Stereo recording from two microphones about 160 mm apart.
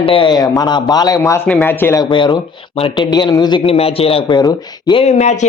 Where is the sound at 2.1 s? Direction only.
30° left (ahead or behind).